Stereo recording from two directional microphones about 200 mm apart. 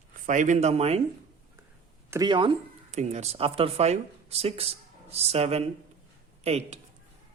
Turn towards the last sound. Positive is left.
turn(degrees=-30)  # may be behind; listen again after turning